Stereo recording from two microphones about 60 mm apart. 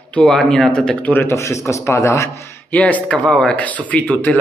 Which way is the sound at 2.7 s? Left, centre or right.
Left.